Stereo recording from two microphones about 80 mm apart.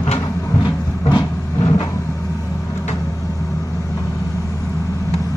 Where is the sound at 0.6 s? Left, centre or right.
Left.